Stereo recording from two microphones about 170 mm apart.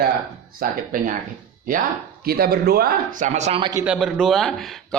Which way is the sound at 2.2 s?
65° right (ahead or behind).